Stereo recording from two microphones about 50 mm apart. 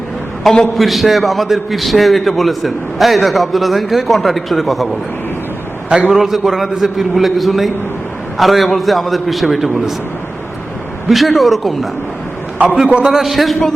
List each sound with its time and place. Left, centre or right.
0.4 s a man's voice: centre
6.1 s a man's voice: centre
11.1 s a man's voice: centre
12.6 s a man's voice: centre
13.1 s a man's voice: centre